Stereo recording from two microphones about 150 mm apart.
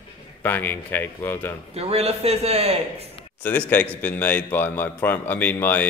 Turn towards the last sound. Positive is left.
turn(degrees=10)  # may be behind; listen again after turning